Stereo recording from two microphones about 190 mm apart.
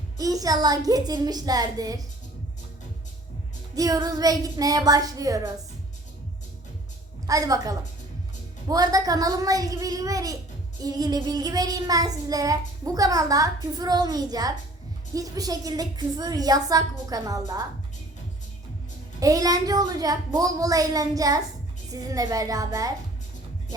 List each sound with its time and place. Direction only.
0.2 s child singing: 20° right (ahead or behind)
3.8 s child singing: 20° right (ahead or behind)
7.3 s a woman's voice: 20° right (ahead or behind)
8.7 s child singing: 20° right (ahead or behind)
19.2 s child singing: 20° right (ahead or behind)
22.1 s a woman's voice: 20° right (ahead or behind)